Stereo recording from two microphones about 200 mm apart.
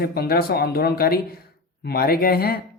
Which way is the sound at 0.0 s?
50° left (ahead or behind).